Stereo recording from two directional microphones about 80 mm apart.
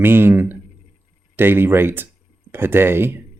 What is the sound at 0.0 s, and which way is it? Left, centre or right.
Speech, right.